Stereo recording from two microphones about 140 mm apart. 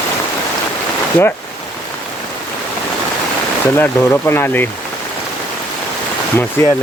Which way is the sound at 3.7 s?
15° left (ahead or behind).